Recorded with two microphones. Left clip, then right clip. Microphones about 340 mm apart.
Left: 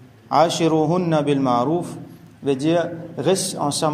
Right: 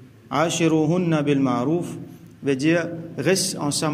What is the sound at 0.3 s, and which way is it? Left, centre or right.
A man's voice, centre.